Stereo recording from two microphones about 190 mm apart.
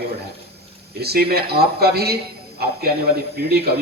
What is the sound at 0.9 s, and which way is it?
Speech, 55° right (ahead or behind).